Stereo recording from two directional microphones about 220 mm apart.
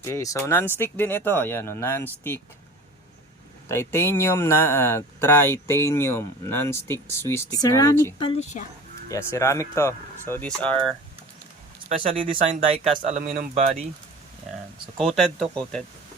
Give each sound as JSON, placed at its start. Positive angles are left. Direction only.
{"t": 0.0, "sound": "speech", "side_deg": 15}
{"t": 3.7, "sound": "speech", "side_deg": 10}
{"t": 11.9, "sound": "speech", "side_deg": -25}
{"t": 15.4, "sound": "speech", "side_deg": -25}